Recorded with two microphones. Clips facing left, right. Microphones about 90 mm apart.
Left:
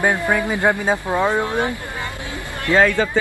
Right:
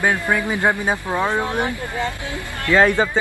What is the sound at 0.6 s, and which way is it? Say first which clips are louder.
Speech: left 1 dB; 15° right (ahead or behind).